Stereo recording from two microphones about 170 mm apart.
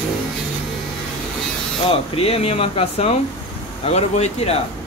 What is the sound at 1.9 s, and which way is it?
Speech, 35° left (ahead or behind).